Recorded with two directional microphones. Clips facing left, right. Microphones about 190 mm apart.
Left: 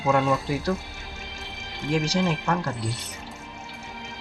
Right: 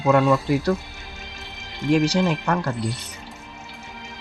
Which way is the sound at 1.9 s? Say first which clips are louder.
Right 7 dB; 70° right (ahead or behind).